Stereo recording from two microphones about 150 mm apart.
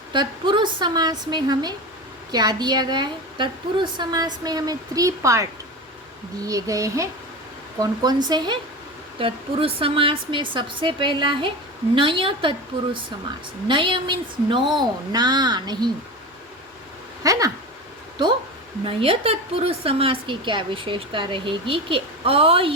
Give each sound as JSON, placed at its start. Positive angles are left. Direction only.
{"t": 0.1, "sound": "a woman's voice", "side_deg": -30}
{"t": 17.2, "sound": "a sound", "side_deg": -25}
{"t": 18.9, "sound": "a woman's voice", "side_deg": -40}